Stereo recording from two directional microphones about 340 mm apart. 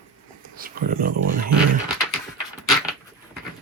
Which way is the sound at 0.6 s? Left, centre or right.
Right.